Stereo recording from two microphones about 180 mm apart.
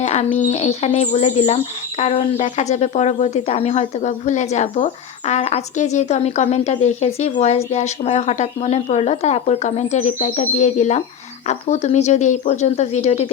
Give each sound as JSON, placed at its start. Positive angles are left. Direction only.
{"t": 0.0, "sound": "speech", "side_deg": 40}